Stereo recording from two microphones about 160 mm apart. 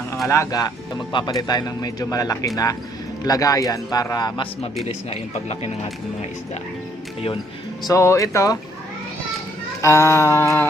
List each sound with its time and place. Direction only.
0.3 s speech: 20° left (ahead or behind)
4.9 s speech: 40° left (ahead or behind)
7.9 s speech: 20° left (ahead or behind)
9.8 s humming: 15° left (ahead or behind)